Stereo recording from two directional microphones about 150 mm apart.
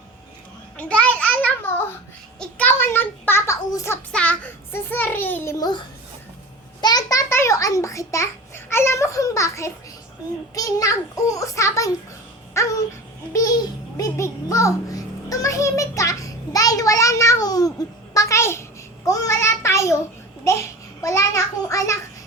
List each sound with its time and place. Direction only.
0.8 s a sound: 10° left (ahead or behind)
4.1 s a child's voice: 10° left (ahead or behind); by 5.8 s 25° left (ahead or behind)
6.8 s a child's voice: 25° left (ahead or behind)
12.5 s music: 20° left (ahead or behind)
13.9 s a child's voice: 20° left (ahead or behind)